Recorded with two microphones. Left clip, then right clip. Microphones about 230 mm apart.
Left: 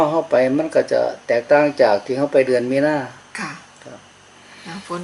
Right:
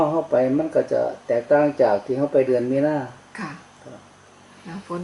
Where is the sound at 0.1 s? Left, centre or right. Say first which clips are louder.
Left 3 dB; right.